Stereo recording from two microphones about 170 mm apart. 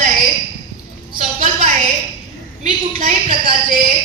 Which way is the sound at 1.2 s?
40° right (ahead or behind).